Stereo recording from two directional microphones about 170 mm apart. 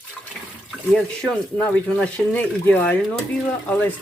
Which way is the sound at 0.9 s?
5° left (ahead or behind).